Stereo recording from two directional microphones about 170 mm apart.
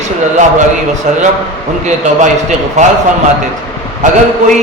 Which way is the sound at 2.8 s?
40° right (ahead or behind).